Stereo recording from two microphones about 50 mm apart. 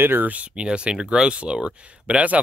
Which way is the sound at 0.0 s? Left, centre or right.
Right.